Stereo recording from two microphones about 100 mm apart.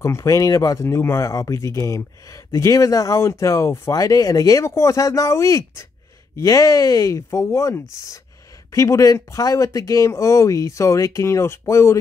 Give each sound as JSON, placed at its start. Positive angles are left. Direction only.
{"t": 0.0, "sound": "speech", "side_deg": 30}